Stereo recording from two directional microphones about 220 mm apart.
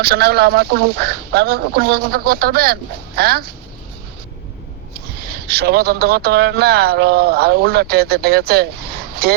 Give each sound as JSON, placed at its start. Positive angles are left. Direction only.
{"t": 0.0, "sound": "speech", "side_deg": -45}
{"t": 5.2, "sound": "speech", "side_deg": -45}